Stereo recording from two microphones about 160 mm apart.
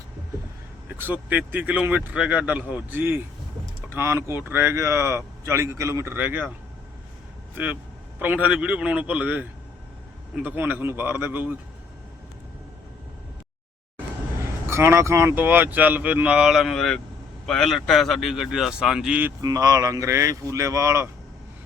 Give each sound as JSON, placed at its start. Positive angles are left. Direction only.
{"t": 0.9, "sound": "speech", "side_deg": -10}
{"t": 7.5, "sound": "speech", "side_deg": -10}
{"t": 14.7, "sound": "speech", "side_deg": -15}
{"t": 19.4, "sound": "speech", "side_deg": -25}